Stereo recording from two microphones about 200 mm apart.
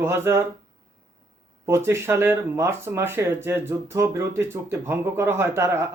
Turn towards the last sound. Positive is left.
turn(degrees=-15)  # may be behind; listen again after turning